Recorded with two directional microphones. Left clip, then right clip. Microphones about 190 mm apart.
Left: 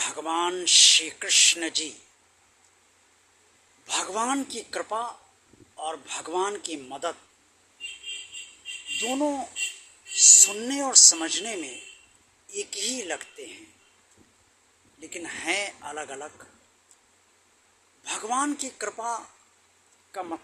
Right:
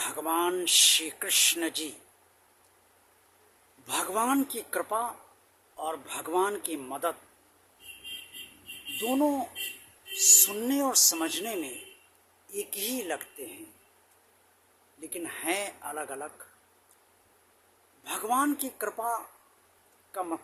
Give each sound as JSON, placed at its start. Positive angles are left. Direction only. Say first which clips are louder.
{"t": 0.0, "sound": "speech", "louder": "left 2 dB", "side_deg": -15}
{"t": 3.8, "sound": "speech", "louder": "left 1 dB", "side_deg": -15}
{"t": 9.0, "sound": "speech", "louder": "even", "side_deg": -15}
{"t": 15.0, "sound": "speech", "louder": "left 3 dB", "side_deg": -20}
{"t": 18.0, "sound": "speech", "louder": "even", "side_deg": -20}